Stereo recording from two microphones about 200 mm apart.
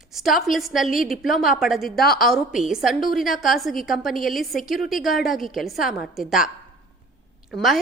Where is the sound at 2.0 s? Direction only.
50° left (ahead or behind).